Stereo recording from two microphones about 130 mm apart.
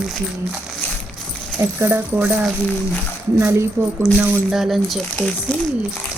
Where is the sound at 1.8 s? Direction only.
15° right (ahead or behind).